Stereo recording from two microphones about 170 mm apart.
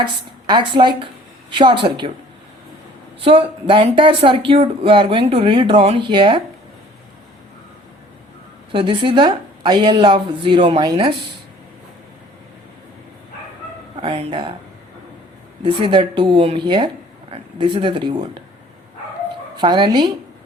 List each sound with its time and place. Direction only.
0.4 s a woman's voice: 25° right (ahead or behind)
3.2 s speech: 30° right (ahead or behind)
8.7 s a woman's voice: 30° right (ahead or behind)
14.0 s a woman's voice: 30° right (ahead or behind)
15.6 s a woman's voice: 30° right (ahead or behind)
19.5 s a woman's voice: 25° right (ahead or behind)